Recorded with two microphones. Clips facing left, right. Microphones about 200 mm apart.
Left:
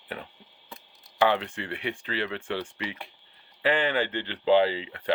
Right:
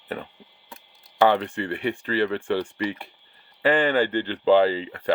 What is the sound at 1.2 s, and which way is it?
Speech, 50° right (ahead or behind).